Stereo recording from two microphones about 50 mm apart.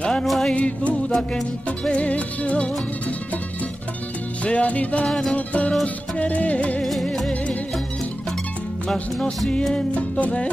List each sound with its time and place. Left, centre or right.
0.2 s music: centre
0.5 s music: left
4.5 s music: left
5.0 s music: centre
5.3 s music: left
6.8 s music: centre
8.8 s music: centre
9.9 s music: left